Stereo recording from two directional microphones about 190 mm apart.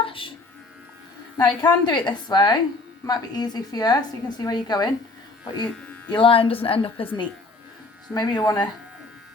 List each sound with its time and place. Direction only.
0.0 s music: 25° left (ahead or behind)
1.4 s a woman's voice: 20° left (ahead or behind)
6.1 s a woman's voice: 25° left (ahead or behind)